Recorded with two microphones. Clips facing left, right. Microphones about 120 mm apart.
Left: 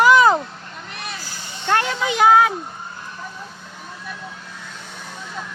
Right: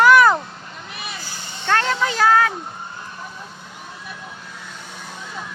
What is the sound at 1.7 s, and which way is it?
Speech, 15° left (ahead or behind).